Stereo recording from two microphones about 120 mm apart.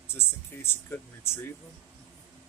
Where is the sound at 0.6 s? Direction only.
20° left (ahead or behind).